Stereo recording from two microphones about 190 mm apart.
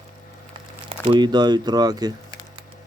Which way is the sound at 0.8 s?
25° right (ahead or behind).